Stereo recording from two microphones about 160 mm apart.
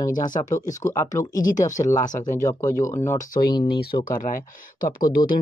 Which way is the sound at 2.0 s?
50° left (ahead or behind).